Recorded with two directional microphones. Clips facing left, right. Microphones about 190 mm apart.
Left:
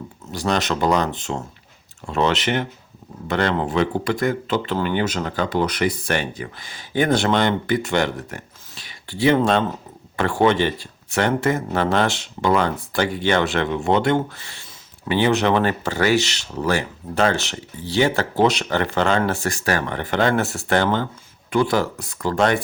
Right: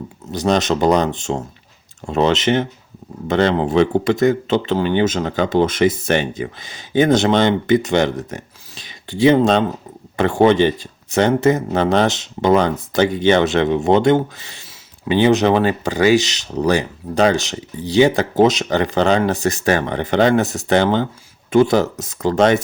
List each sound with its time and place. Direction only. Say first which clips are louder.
0.3 s speech: right 5 dB; 20° right (ahead or behind)